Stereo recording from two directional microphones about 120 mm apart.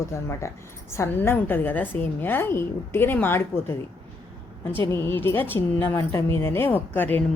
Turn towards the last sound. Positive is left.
turn(degrees=15)  # may be behind; listen again after turning